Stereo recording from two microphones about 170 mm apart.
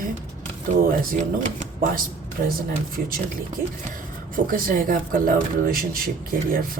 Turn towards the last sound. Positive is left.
turn(degrees=-55)  # may be behind; listen again after turning